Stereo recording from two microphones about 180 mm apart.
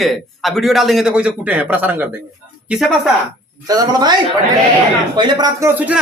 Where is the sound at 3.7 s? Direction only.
20° right (ahead or behind).